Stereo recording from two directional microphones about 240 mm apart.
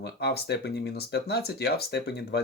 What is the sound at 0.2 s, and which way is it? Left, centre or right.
Speech, left.